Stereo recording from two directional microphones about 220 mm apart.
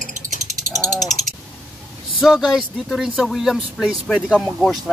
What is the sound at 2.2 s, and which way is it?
Speech, centre (ahead or behind).